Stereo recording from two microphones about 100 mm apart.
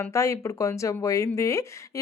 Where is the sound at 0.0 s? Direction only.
30° left (ahead or behind).